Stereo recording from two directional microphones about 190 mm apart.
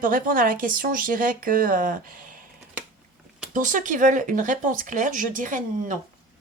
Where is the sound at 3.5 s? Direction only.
45° right (ahead or behind).